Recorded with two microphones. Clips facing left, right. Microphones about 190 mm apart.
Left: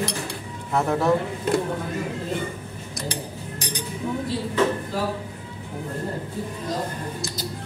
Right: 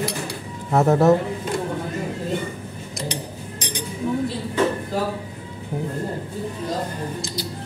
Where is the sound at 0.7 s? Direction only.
45° right (ahead or behind).